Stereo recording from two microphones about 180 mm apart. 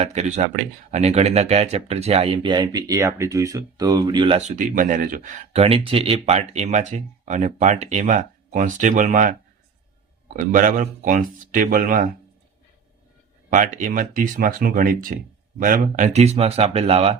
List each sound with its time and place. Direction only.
0.0 s speech: 40° right (ahead or behind)
4.4 s speech: 45° right (ahead or behind)
13.5 s speech: 45° right (ahead or behind)